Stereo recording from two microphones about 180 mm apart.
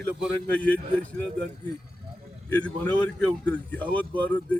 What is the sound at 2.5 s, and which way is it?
A man's voice, 5° left (ahead or behind).